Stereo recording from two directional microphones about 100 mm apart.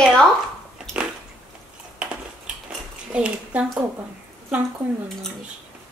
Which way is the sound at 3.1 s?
10° right (ahead or behind).